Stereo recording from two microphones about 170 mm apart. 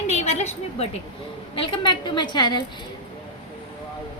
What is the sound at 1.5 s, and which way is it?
A woman's voice, 30° left (ahead or behind).